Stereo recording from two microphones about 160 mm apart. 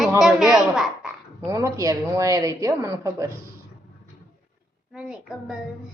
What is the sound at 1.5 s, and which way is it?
A woman's voice, 20° right (ahead or behind).